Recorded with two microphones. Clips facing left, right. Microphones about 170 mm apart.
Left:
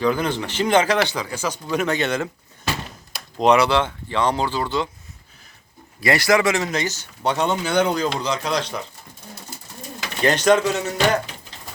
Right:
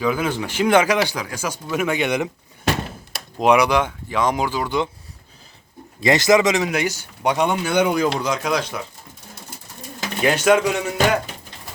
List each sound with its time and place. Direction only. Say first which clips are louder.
0.0 s a man's voice: even; 5° right (ahead or behind)
3.3 s a man's voice: even; 10° right (ahead or behind)
6.0 s a man's voice: right 3 dB; 20° right (ahead or behind)
10.2 s a man's voice: even; 10° right (ahead or behind)